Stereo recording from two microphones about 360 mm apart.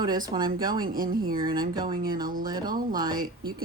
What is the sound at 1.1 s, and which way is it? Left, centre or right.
Speech, right.